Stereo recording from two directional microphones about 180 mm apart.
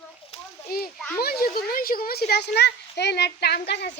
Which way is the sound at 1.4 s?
55° left (ahead or behind).